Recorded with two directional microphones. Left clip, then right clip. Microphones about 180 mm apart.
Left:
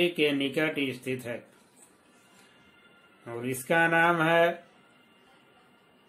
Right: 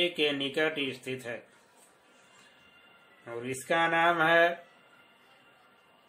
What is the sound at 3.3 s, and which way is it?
Speech, 15° left (ahead or behind).